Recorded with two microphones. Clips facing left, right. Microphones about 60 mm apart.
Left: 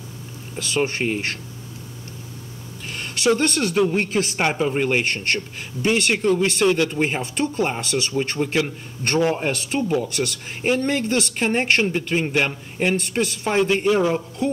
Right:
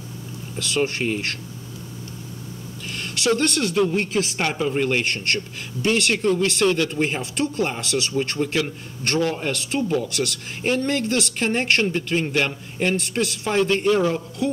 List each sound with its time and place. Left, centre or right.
0.6 s speech: centre
3.0 s speech: centre
8.1 s speech: centre
13.1 s speech: centre
13.5 s speech: centre